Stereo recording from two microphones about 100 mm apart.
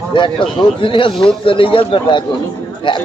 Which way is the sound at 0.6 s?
55° left (ahead or behind).